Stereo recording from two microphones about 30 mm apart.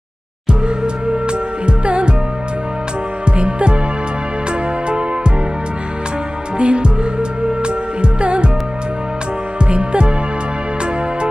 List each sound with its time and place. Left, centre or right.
1.0 s music: right
3.3 s music: right
6.6 s music: right
9.6 s music: right